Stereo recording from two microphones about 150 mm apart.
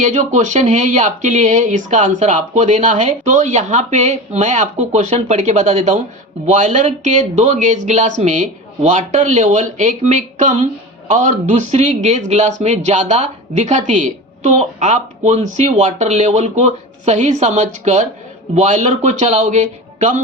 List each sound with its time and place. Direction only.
0.0 s a man's voice: 50° right (ahead or behind)